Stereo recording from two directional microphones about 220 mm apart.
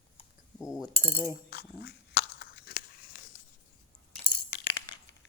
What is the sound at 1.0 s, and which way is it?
Coin, 10° left (ahead or behind).